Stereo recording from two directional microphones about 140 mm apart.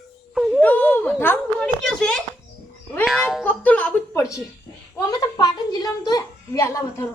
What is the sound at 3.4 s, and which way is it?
Music, 10° left (ahead or behind).